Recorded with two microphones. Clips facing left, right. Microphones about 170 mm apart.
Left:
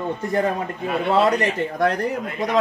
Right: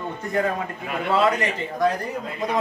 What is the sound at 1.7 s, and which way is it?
Speech, 70° left (ahead or behind).